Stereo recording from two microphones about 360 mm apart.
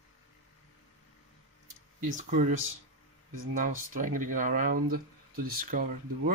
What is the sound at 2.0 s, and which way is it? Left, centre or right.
Speech, right.